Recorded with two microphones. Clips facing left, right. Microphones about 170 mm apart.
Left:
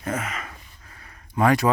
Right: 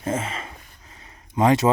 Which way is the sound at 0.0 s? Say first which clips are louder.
Right 2 dB; 25° right (ahead or behind).